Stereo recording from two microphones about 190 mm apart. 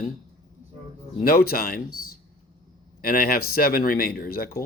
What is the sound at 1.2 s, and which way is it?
Speech, 50° left (ahead or behind).